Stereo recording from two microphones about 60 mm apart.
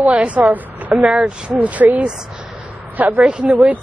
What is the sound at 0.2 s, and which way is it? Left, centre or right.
A woman's voice, right.